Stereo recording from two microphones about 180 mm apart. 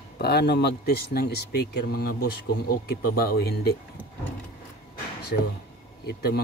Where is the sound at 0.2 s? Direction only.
65° left (ahead or behind).